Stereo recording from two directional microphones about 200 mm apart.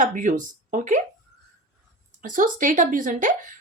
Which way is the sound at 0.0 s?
40° right (ahead or behind).